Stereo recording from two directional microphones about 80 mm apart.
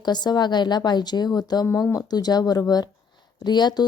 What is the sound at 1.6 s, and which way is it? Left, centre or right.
A woman's voice, left.